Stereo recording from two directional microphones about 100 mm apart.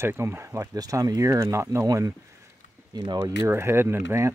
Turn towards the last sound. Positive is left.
turn(degrees=-25)  # may be behind; listen again after turning